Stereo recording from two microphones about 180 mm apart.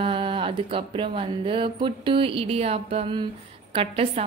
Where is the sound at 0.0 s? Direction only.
30° right (ahead or behind).